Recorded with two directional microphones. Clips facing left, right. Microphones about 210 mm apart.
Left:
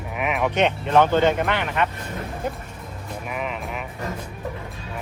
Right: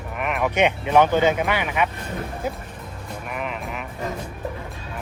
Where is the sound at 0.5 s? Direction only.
10° right (ahead or behind).